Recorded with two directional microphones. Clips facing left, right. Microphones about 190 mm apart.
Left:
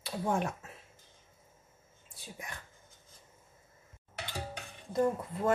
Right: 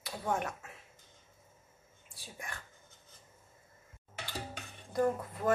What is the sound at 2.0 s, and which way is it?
Whispering, 20° left (ahead or behind).